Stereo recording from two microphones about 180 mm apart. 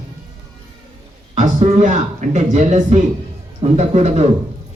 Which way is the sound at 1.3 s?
40° right (ahead or behind).